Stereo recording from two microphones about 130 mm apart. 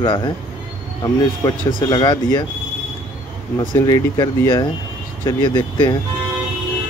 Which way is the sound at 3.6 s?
35° left (ahead or behind).